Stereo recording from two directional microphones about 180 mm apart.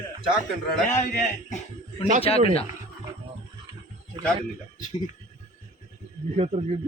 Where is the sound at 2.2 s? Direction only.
30° left (ahead or behind).